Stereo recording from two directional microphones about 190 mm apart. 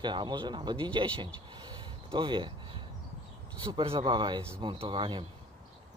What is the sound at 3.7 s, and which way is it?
Speech, 25° right (ahead or behind).